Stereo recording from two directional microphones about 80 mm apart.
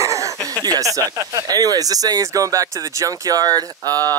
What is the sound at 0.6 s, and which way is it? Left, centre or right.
Speech, right.